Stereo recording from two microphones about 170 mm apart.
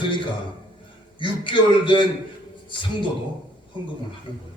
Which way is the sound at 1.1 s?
30° left (ahead or behind).